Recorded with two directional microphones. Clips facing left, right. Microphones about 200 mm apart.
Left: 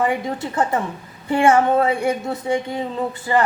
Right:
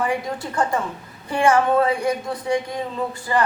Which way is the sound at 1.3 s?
25° left (ahead or behind).